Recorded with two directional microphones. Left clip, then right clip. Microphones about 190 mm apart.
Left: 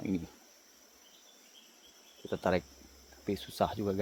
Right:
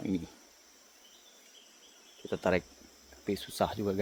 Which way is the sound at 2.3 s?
Centre (ahead or behind).